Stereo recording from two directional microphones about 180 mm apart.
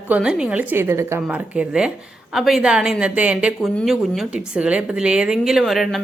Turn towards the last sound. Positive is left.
turn(degrees=0)  # may be behind; listen again after turning